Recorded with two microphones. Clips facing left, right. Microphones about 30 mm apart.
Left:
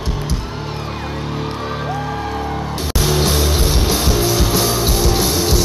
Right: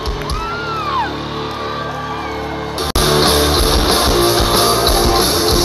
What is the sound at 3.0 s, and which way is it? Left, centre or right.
Music, right.